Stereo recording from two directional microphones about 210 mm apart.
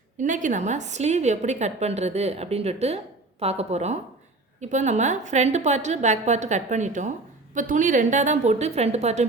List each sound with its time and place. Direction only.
0.2 s a woman's voice: 35° right (ahead or behind)